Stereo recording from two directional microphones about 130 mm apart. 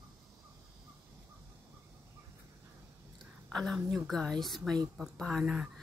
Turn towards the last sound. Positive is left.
turn(degrees=-5)  # may be behind; listen again after turning